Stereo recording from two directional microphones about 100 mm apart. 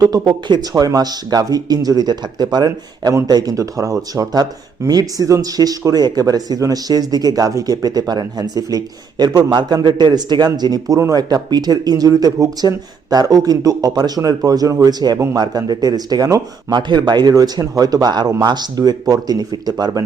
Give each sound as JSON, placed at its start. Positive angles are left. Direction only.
{"t": 0.0, "sound": "speech", "side_deg": -45}
{"t": 0.7, "sound": "speech", "side_deg": -35}